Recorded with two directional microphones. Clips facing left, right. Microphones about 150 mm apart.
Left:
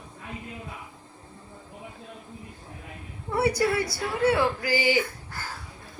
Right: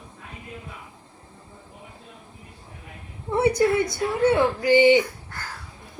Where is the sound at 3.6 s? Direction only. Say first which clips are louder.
Right 5 dB; 20° right (ahead or behind).